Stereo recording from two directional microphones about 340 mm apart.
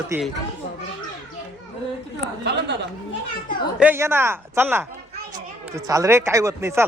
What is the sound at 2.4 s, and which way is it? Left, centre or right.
Speech, right.